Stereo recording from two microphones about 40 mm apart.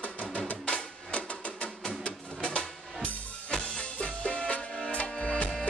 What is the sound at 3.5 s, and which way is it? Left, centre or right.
Music, left.